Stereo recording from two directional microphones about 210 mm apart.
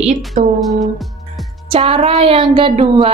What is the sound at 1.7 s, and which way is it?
Speech, 25° right (ahead or behind).